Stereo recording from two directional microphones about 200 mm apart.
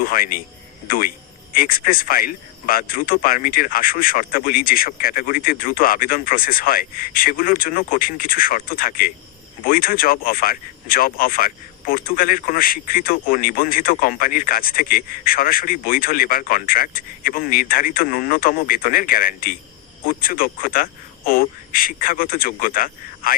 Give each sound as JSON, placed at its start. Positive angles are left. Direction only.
{"t": 0.0, "sound": "speech", "side_deg": 45}